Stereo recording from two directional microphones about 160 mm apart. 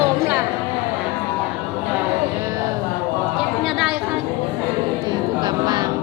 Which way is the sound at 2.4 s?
20° right (ahead or behind).